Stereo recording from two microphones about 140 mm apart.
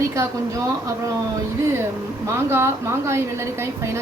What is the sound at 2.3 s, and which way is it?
A woman's voice, 20° right (ahead or behind).